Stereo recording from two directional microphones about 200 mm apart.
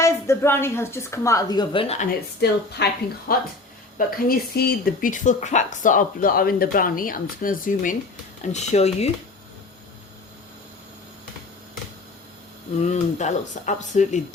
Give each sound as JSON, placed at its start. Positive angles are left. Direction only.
{"t": 0.0, "sound": "a woman's voice", "side_deg": 15}
{"t": 2.0, "sound": "speech", "side_deg": 50}
{"t": 12.8, "sound": "speech", "side_deg": 35}